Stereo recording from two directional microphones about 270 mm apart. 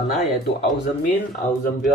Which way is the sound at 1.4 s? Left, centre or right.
Left.